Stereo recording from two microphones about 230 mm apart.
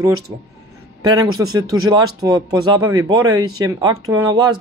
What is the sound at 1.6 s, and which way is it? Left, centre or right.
Speech, centre.